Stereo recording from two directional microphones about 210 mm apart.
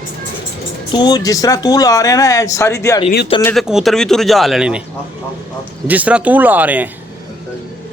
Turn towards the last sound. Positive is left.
turn(degrees=-10)  # may be behind; listen again after turning